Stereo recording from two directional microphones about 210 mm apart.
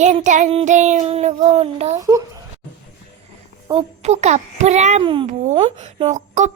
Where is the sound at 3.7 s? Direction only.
30° right (ahead or behind).